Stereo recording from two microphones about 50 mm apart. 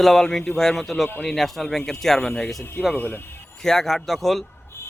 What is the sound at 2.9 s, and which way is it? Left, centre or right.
Speech, left.